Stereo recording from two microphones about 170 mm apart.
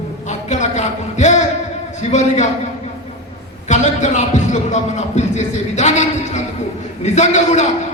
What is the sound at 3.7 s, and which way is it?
A man's voice, 45° left (ahead or behind).